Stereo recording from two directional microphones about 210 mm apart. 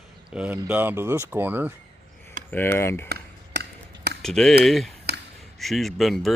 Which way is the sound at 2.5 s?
10° left (ahead or behind).